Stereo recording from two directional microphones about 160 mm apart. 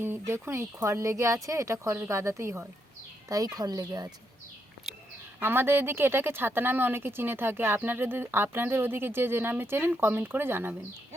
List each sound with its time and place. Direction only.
0.0 s speech: 15° right (ahead or behind)
5.4 s speech: 15° right (ahead or behind)